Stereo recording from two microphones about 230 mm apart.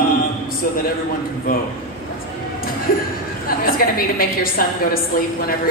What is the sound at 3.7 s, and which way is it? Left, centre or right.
A woman's voice, left.